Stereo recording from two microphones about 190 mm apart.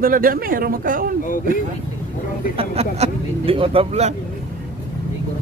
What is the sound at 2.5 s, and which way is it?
Speech, 30° right (ahead or behind).